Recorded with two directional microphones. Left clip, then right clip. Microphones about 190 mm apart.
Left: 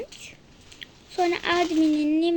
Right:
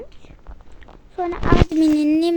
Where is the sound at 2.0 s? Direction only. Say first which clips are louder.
Right 5 dB; 15° right (ahead or behind).